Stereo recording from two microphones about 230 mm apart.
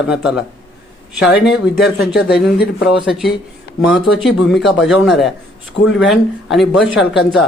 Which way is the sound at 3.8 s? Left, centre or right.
Centre.